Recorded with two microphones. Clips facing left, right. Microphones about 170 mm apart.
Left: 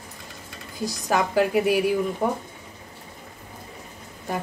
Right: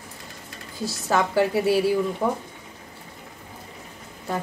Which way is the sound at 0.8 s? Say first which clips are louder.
Even; 15° left (ahead or behind).